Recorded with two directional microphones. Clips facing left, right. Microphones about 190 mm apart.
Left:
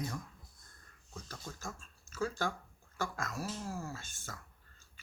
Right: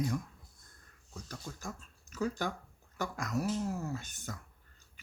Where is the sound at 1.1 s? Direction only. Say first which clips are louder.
Right 2 dB; 15° right (ahead or behind).